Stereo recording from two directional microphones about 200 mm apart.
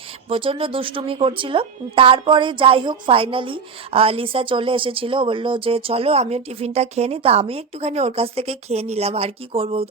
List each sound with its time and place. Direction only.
0.3 s a woman's voice: 25° right (ahead or behind)